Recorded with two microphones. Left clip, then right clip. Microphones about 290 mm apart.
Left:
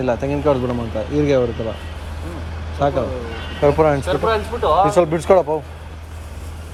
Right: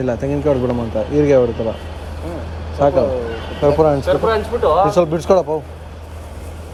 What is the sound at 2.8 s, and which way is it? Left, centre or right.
Speech, left.